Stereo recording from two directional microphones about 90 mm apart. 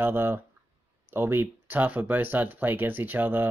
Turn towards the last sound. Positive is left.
turn(degrees=-20)  # may be behind; listen again after turning